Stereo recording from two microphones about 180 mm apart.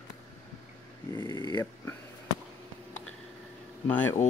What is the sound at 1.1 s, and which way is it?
Speech, 15° left (ahead or behind).